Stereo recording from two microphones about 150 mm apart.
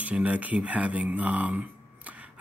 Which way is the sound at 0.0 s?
10° right (ahead or behind).